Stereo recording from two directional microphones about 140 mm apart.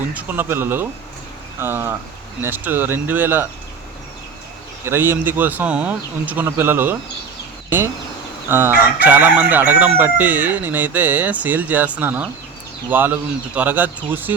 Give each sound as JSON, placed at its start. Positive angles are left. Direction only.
{"t": 0.0, "sound": "chicken", "side_deg": -10}
{"t": 4.9, "sound": "chicken", "side_deg": -15}
{"t": 8.4, "sound": "chicken", "side_deg": -15}